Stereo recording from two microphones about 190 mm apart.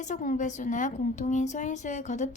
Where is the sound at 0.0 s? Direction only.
45° left (ahead or behind).